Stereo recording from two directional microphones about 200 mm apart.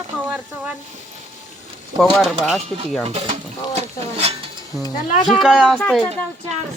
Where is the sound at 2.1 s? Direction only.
Centre (ahead or behind).